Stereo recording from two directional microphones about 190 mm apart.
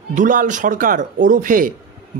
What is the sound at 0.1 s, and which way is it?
A man's voice, 45° right (ahead or behind).